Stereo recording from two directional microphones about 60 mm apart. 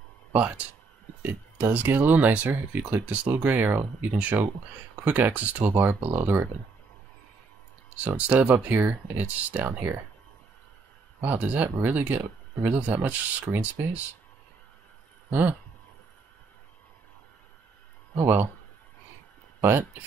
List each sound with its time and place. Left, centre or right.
0.3 s speech: right
1.9 s speech: right
5.8 s speech: right
8.2 s speech: right
9.8 s speech: right
11.2 s speech: right
18.2 s speech: right
19.6 s speech: right